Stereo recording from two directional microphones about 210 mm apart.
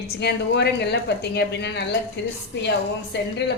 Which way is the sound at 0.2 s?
50° left (ahead or behind).